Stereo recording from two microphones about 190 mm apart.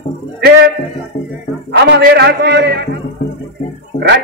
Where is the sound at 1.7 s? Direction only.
60° right (ahead or behind).